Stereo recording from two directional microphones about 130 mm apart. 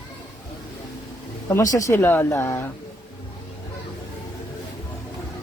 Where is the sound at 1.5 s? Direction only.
25° left (ahead or behind).